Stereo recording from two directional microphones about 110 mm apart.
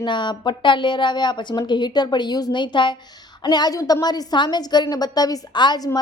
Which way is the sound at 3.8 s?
30° left (ahead or behind).